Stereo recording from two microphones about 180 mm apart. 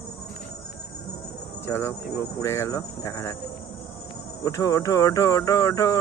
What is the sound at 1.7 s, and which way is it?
Speech, 15° left (ahead or behind).